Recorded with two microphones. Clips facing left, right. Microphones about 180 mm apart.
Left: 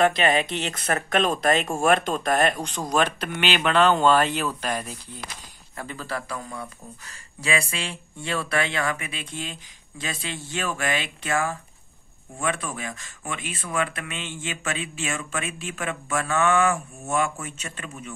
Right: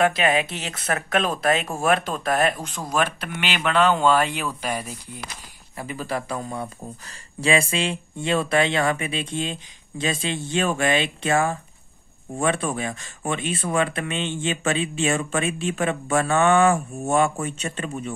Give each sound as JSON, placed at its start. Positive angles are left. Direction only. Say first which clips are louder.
{"t": 0.0, "sound": "speech", "louder": "even", "side_deg": -5}